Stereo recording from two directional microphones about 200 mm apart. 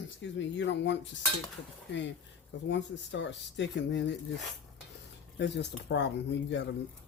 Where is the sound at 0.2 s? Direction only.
65° left (ahead or behind).